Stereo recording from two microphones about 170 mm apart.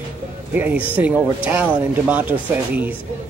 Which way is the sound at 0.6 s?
10° right (ahead or behind).